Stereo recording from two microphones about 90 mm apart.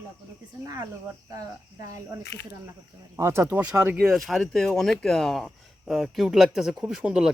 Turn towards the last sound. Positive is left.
turn(degrees=-10)  # may be behind; listen again after turning